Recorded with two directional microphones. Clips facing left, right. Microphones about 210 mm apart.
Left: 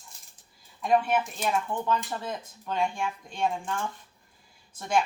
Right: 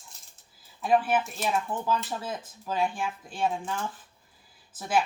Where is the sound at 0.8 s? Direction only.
Centre (ahead or behind).